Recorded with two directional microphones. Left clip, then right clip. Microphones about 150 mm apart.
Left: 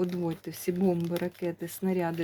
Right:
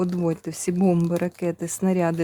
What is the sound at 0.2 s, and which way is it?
Speech, 65° right (ahead or behind).